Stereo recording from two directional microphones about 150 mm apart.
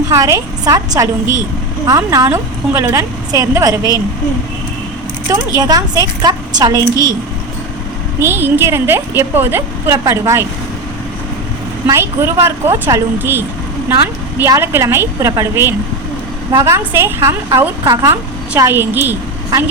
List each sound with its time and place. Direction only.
0.1 s a woman's voice: 20° right (ahead or behind)
5.3 s a woman's voice: 25° right (ahead or behind)
8.2 s a woman's voice: 15° right (ahead or behind)
11.9 s a woman's voice: 20° right (ahead or behind)